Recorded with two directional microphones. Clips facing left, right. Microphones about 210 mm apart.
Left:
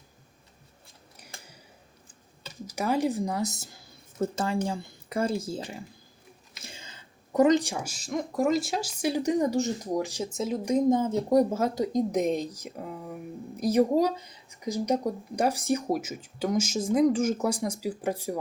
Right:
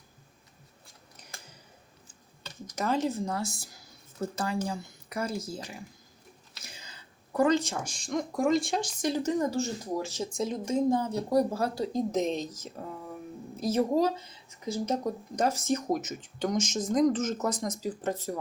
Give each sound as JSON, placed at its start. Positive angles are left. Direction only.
{"t": 2.4, "sound": "speech", "side_deg": 10}
{"t": 10.7, "sound": "speech", "side_deg": 20}